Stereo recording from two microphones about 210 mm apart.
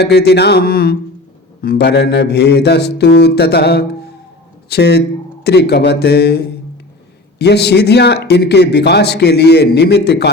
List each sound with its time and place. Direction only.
0.0 s a man's voice: 50° left (ahead or behind)